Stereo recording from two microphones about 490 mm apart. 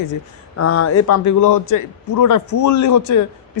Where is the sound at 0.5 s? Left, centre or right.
Left.